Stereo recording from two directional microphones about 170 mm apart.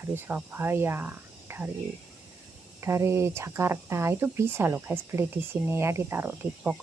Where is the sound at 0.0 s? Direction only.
15° right (ahead or behind).